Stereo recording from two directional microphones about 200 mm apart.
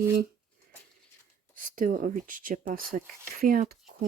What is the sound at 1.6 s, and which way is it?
Speech, 45° right (ahead or behind).